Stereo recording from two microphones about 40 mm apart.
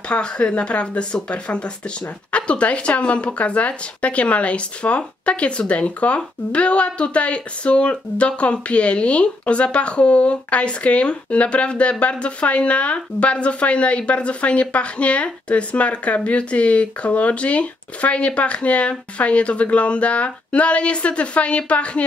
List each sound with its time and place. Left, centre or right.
0.1 s a woman's voice: left